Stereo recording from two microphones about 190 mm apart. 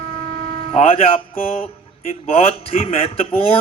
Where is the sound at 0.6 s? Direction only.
30° left (ahead or behind).